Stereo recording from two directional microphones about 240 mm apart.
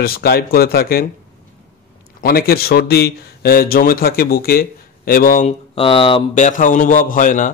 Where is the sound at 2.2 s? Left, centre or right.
Left.